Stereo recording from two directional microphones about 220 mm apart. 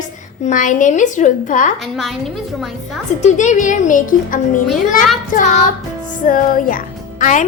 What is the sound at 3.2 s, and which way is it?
Speech, 35° left (ahead or behind).